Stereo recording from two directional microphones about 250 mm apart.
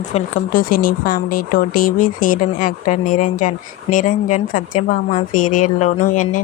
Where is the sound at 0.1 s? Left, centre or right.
Left.